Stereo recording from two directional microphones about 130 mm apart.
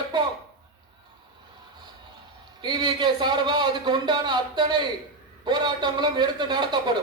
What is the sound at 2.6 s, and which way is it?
Speech, 35° right (ahead or behind).